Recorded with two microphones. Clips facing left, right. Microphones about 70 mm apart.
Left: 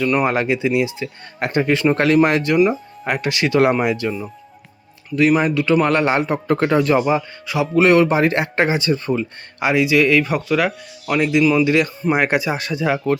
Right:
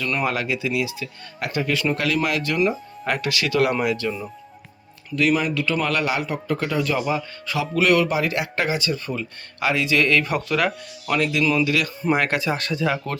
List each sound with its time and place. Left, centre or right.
0.0 s speech: centre
0.3 s speech: left
2.6 s speech: centre
3.2 s speech: left
5.1 s speech: left; by 11.2 s centre
11.2 s speech: left
12.1 s speech: centre